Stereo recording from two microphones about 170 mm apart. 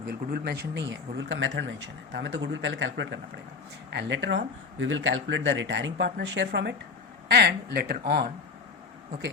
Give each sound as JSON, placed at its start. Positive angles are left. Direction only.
{"t": 0.1, "sound": "speech", "side_deg": -65}
{"t": 7.3, "sound": "speech", "side_deg": -75}